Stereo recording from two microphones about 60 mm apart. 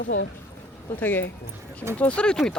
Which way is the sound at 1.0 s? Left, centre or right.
Left.